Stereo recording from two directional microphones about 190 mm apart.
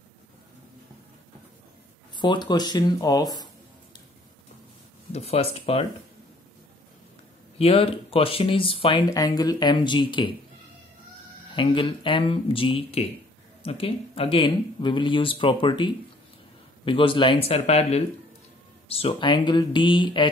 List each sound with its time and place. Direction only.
2.1 s speech: 25° left (ahead or behind)
5.1 s speech: 35° left (ahead or behind)
7.5 s speech: 30° left (ahead or behind)
11.5 s speech: 25° left (ahead or behind)